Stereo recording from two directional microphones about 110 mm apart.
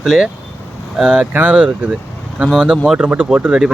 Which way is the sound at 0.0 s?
5° right (ahead or behind).